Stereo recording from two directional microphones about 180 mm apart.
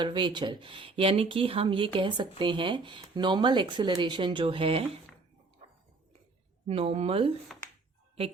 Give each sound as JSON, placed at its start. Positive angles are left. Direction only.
{"t": 0.0, "sound": "speech", "side_deg": -25}
{"t": 5.6, "sound": "a sound", "side_deg": -40}
{"t": 6.7, "sound": "speech", "side_deg": -35}